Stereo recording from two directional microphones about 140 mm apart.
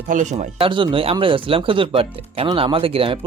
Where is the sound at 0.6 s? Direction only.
35° right (ahead or behind).